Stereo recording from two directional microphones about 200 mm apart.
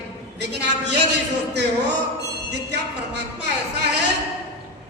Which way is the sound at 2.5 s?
55° right (ahead or behind).